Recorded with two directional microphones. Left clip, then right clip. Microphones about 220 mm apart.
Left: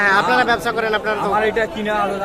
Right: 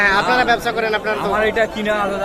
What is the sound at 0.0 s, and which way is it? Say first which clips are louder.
Speech: even; centre (ahead or behind).